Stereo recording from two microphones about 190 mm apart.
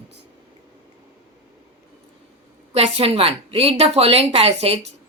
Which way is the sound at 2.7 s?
30° right (ahead or behind).